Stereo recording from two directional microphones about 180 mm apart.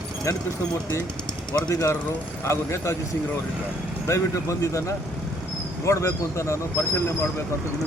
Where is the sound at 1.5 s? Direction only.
20° left (ahead or behind).